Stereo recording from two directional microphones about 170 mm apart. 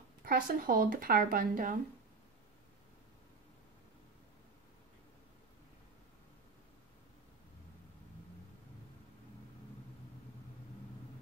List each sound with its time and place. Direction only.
0.2 s speech: 60° right (ahead or behind)